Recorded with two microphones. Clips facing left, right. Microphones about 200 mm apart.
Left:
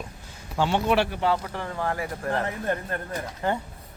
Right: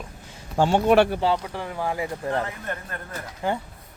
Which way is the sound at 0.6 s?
45° right (ahead or behind).